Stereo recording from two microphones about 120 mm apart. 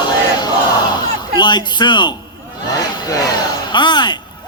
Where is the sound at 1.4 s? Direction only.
40° left (ahead or behind).